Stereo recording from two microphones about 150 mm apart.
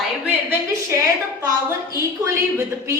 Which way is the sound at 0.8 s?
20° right (ahead or behind).